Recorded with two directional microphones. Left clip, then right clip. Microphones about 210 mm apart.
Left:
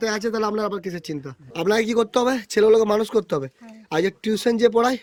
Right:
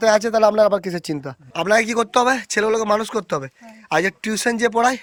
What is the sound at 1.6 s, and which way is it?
Speech, 5° left (ahead or behind).